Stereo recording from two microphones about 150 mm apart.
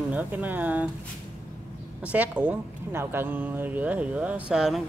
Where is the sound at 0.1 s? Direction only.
10° right (ahead or behind).